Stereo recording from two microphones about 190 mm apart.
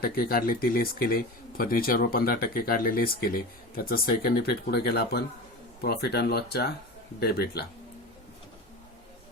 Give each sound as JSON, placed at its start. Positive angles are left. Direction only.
{"t": 0.0, "sound": "speech", "side_deg": 50}